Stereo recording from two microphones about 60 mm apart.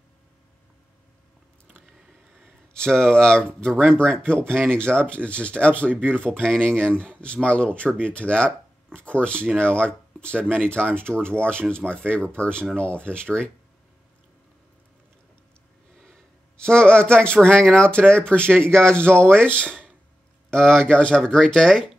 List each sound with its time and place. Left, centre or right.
2.4 s speech: centre
16.0 s speech: centre
19.0 s speech: right
20.4 s speech: centre